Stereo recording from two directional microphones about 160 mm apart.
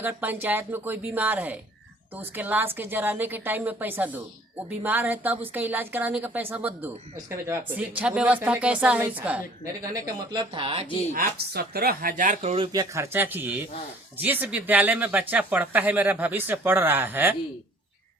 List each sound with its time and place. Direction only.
0.0 s a woman's voice: 10° right (ahead or behind)
9.9 s speech: 30° right (ahead or behind)
11.1 s speech: 70° right (ahead or behind); by 12.6 s 45° right (ahead or behind)
12.7 s a woman's voice: 20° right (ahead or behind)